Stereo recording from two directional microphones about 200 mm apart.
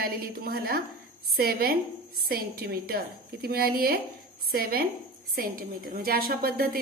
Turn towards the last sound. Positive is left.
turn(degrees=-50)  # may be behind; listen again after turning